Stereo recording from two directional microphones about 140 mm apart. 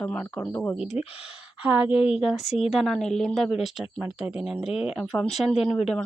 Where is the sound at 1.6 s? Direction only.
10° right (ahead or behind).